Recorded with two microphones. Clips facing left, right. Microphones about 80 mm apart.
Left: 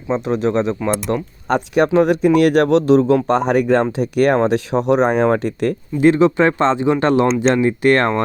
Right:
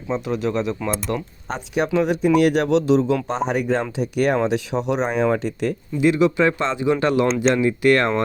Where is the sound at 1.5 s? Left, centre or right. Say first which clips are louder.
Left 7 dB; left.